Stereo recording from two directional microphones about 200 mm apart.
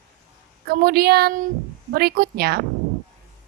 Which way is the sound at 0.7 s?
50° right (ahead or behind).